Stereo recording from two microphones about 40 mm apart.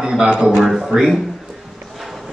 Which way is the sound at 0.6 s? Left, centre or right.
Centre.